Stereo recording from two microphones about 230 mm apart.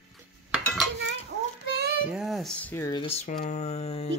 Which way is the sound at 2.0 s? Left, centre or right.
Centre.